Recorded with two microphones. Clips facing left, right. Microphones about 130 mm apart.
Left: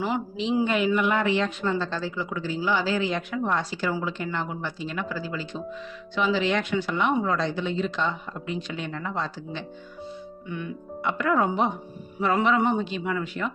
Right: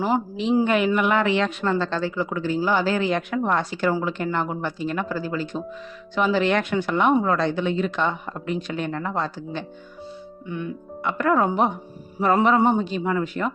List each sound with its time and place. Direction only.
0.3 s a woman's voice: 50° right (ahead or behind)
11.0 s a man's voice: 45° right (ahead or behind)